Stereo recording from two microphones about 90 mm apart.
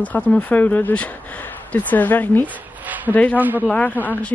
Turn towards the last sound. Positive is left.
turn(degrees=20)  # may be behind; listen again after turning